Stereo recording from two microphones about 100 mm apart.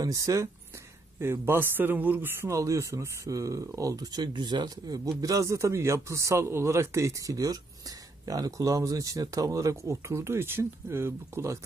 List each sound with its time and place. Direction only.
0.0 s a man's voice: 35° right (ahead or behind)